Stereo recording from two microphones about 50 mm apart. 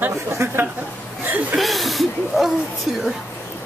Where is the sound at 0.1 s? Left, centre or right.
Right.